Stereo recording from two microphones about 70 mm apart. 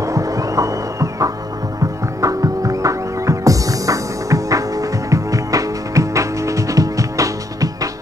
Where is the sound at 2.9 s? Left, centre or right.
Right.